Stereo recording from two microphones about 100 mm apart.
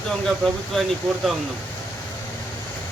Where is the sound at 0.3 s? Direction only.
Centre (ahead or behind).